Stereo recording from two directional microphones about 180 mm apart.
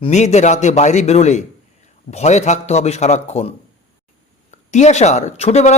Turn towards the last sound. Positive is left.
turn(degrees=35)  # may be behind; listen again after turning